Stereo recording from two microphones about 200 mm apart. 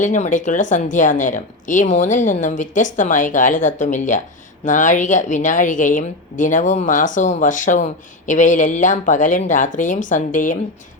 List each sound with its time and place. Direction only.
0.0 s speech: 40° left (ahead or behind)